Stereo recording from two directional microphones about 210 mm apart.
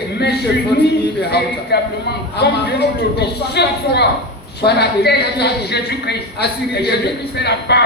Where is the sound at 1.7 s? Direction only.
50° left (ahead or behind).